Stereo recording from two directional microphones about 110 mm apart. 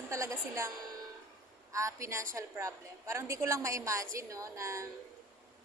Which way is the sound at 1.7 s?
30° right (ahead or behind).